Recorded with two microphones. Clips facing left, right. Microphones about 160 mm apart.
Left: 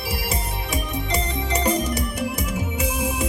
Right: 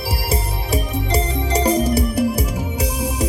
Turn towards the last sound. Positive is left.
turn(degrees=-35)  # may be behind; listen again after turning